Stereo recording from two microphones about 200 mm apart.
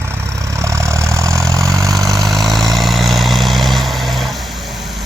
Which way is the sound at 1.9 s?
Centre (ahead or behind).